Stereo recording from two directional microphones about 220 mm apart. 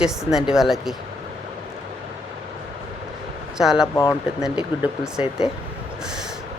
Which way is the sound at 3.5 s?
Centre (ahead or behind).